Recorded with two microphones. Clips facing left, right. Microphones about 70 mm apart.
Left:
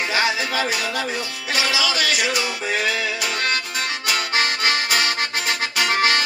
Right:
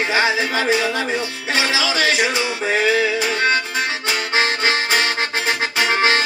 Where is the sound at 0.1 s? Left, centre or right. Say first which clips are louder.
Right 3 dB; right.